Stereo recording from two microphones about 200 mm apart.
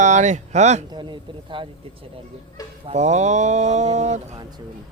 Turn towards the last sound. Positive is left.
turn(degrees=-35)  # may be behind; listen again after turning